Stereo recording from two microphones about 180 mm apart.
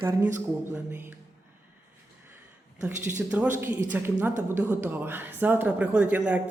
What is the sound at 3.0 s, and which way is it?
Speech, 10° right (ahead or behind).